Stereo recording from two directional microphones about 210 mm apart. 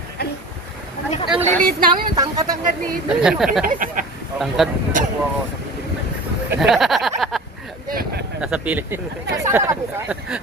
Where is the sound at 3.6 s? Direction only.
40° right (ahead or behind).